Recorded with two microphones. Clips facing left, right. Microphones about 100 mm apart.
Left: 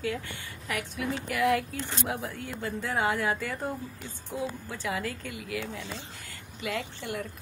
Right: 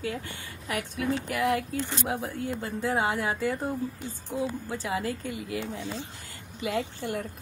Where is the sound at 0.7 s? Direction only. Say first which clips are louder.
Right 3 dB; 35° right (ahead or behind).